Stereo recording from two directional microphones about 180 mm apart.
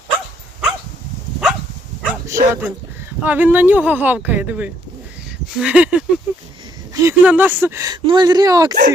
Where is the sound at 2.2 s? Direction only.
15° right (ahead or behind).